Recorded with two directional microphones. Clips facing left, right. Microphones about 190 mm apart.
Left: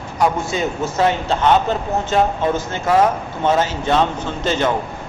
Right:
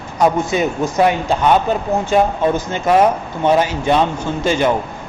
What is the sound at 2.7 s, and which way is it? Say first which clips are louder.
A man's voice: right 2 dB; 20° right (ahead or behind).